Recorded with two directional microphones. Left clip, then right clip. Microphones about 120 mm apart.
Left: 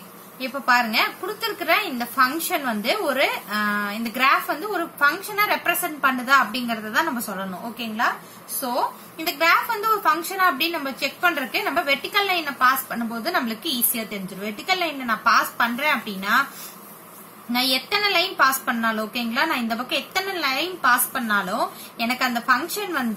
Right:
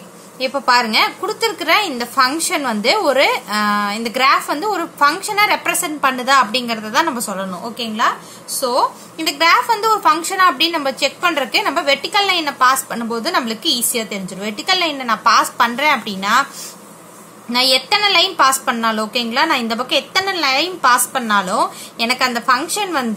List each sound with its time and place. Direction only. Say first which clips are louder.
0.4 s a woman's voice: right 5 dB; 25° right (ahead or behind)
17.5 s a woman's voice: right 8 dB; 25° right (ahead or behind)